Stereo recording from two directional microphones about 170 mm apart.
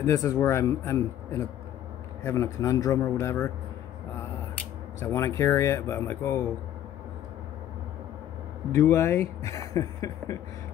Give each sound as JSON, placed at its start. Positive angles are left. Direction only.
{"t": 0.0, "sound": "speech", "side_deg": 20}
{"t": 5.0, "sound": "speech", "side_deg": 15}
{"t": 8.7, "sound": "speech", "side_deg": 15}